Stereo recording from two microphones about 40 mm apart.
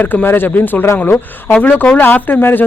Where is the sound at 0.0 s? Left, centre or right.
Left.